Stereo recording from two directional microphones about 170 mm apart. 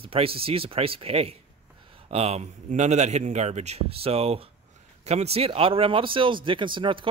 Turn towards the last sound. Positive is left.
turn(degrees=-30)  # may be behind; listen again after turning